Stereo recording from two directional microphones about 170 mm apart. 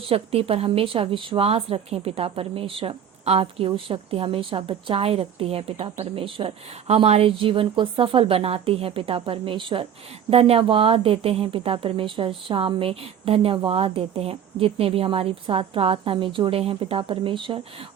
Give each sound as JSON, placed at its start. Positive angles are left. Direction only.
{"t": 0.1, "sound": "a woman's voice", "side_deg": -35}